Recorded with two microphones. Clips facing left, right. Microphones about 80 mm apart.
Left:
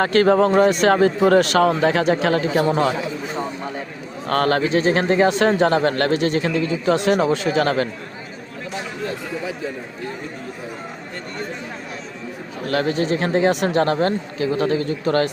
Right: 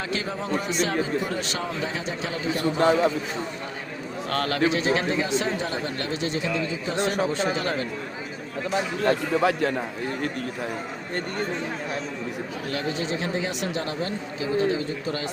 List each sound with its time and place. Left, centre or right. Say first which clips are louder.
0.0 s speech: left 15 dB; left
4.3 s speech: left 6 dB; left
9.0 s speech: right 8 dB; right
12.7 s speech: left 9 dB; left